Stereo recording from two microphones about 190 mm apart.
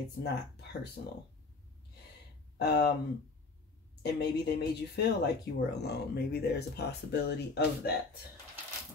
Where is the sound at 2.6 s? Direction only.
60° left (ahead or behind).